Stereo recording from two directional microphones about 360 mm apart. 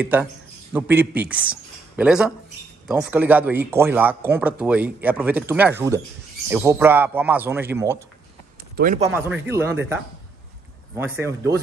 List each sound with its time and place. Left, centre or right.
0.0 s speech: centre
8.7 s speech: right
9.0 s speech: centre
11.0 s speech: centre